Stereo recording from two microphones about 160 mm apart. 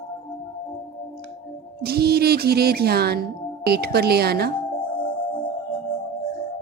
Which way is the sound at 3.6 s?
85° right.